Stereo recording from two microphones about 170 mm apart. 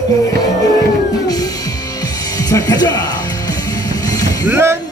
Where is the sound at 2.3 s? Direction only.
20° left (ahead or behind).